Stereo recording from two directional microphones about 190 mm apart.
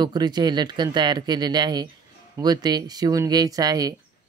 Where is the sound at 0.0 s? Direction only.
20° right (ahead or behind).